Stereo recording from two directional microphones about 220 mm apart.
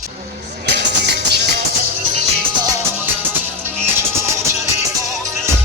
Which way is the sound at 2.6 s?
10° right (ahead or behind).